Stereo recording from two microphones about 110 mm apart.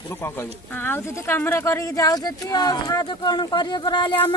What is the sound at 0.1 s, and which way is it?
A woman's voice, 20° left (ahead or behind).